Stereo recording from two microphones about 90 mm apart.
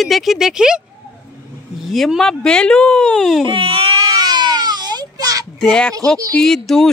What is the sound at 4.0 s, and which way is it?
Baby cry, 40° right (ahead or behind).